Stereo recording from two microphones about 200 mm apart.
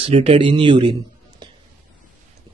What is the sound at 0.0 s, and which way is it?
Speech, 30° right (ahead or behind).